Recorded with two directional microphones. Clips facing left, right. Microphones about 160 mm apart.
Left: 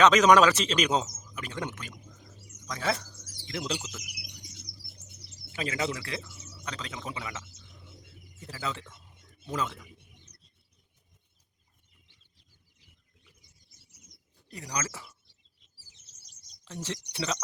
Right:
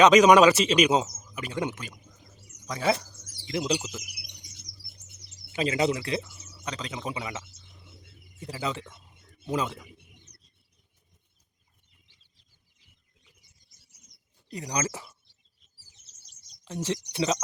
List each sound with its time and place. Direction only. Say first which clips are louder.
0.0 s speech: right 4 dB; 15° right (ahead or behind)
5.5 s speech: right 6 dB; 20° right (ahead or behind)
14.4 s speech: right 5 dB; 20° right (ahead or behind)
16.6 s speech: right 7 dB; 15° right (ahead or behind)